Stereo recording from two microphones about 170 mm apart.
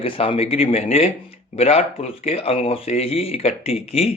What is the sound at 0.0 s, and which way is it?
Speech, 35° left (ahead or behind).